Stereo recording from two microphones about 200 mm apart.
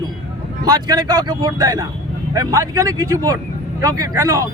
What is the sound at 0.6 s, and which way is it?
Speech, 20° right (ahead or behind).